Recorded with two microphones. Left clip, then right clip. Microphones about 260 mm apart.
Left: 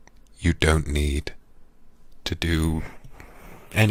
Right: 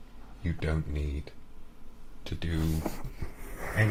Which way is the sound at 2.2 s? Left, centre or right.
Left.